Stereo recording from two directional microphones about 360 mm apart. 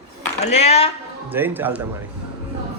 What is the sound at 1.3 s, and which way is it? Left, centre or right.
Speech, centre.